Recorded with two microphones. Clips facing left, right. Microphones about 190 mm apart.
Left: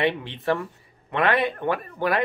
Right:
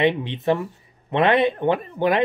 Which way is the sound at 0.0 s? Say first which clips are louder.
Right 4 dB; 20° right (ahead or behind).